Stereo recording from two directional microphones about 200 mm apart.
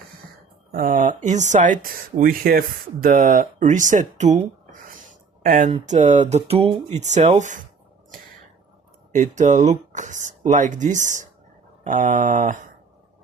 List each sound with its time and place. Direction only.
0.7 s speech: 45° right (ahead or behind)
5.4 s speech: 45° right (ahead or behind)
9.1 s speech: 40° right (ahead or behind)